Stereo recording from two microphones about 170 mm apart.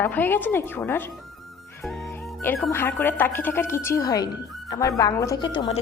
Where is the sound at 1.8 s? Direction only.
Centre (ahead or behind).